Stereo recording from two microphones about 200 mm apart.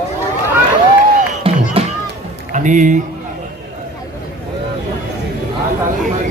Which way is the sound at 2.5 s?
40° right (ahead or behind).